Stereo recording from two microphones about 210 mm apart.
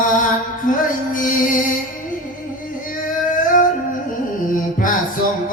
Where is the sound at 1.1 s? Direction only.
40° left (ahead or behind).